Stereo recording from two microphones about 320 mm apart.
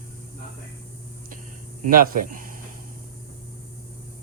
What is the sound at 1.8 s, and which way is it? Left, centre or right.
Speech, right.